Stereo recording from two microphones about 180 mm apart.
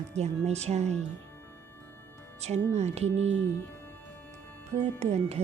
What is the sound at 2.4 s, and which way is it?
Music, 35° right (ahead or behind).